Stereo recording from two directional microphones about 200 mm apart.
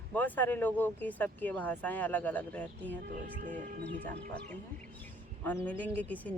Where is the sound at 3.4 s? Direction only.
40° right (ahead or behind).